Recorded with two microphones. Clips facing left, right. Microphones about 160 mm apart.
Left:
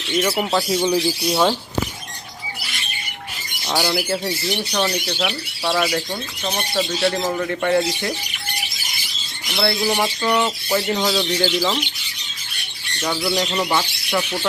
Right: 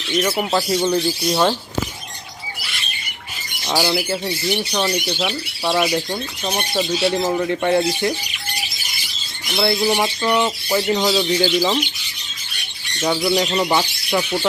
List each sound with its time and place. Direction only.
0.2 s speech: 5° left (ahead or behind)
3.7 s speech: 5° right (ahead or behind)
9.5 s speech: 15° right (ahead or behind)
9.8 s speech: 5° right (ahead or behind)
11.4 s speech: 20° right (ahead or behind)
13.0 s speech: 20° right (ahead or behind)
13.3 s speech: 10° right (ahead or behind)